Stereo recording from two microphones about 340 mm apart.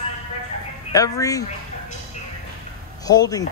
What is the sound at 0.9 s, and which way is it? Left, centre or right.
Speech, centre.